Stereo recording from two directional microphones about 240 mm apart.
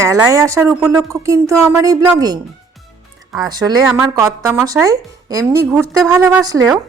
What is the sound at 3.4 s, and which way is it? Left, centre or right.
A woman's voice, centre.